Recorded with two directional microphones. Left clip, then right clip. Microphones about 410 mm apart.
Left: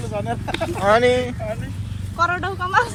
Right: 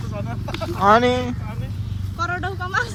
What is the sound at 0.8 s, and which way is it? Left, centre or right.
Speech, centre.